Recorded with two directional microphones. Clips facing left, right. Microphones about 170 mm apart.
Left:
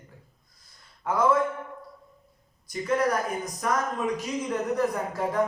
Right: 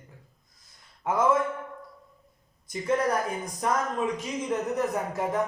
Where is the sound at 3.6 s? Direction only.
25° right (ahead or behind).